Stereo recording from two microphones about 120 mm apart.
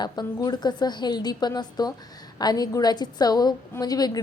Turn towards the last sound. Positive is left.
turn(degrees=30)  # may be behind; listen again after turning